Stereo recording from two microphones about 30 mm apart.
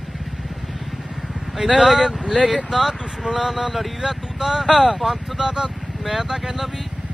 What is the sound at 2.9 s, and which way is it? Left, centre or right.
Speech, right.